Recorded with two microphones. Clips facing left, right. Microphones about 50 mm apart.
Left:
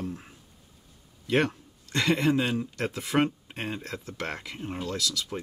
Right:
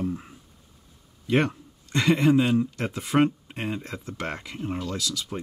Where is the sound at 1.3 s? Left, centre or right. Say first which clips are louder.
Right 2 dB; right.